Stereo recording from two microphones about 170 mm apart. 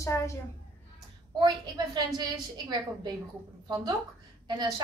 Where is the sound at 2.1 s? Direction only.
25° right (ahead or behind).